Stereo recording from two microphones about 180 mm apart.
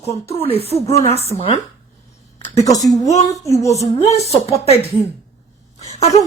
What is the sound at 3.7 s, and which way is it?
Speech, 35° left (ahead or behind).